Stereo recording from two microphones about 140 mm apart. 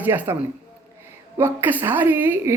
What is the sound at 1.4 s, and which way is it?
A woman's voice, 15° right (ahead or behind).